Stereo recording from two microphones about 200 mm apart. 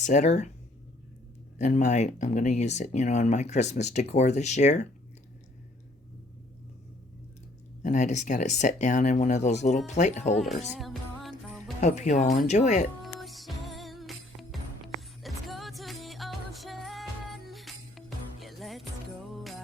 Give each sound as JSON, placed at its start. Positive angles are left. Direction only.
{"t": 0.0, "sound": "speech", "side_deg": 35}
{"t": 1.5, "sound": "speech", "side_deg": 35}
{"t": 7.8, "sound": "speech", "side_deg": 35}
{"t": 10.8, "sound": "music", "side_deg": 0}
{"t": 11.8, "sound": "speech", "side_deg": 35}
{"t": 13.1, "sound": "music", "side_deg": 0}